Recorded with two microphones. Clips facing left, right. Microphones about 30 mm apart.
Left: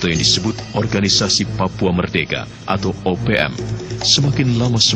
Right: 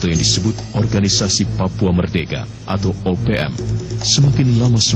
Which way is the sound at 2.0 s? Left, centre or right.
Centre.